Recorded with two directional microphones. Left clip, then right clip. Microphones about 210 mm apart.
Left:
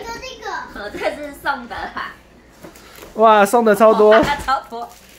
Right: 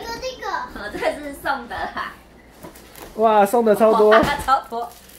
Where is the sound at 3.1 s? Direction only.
35° left (ahead or behind).